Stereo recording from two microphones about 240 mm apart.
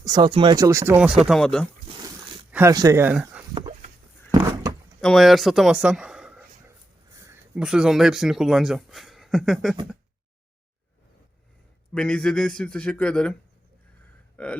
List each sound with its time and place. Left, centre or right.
0.0 s speech: centre
2.5 s speech: centre
3.5 s dog: right
4.3 s a sound: centre
4.9 s speech: centre
11.9 s a man's voice: centre
14.3 s a sound: centre